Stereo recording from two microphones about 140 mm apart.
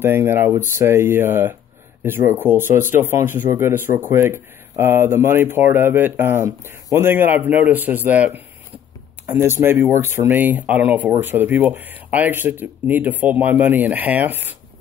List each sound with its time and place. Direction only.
0.0 s speech: 15° right (ahead or behind)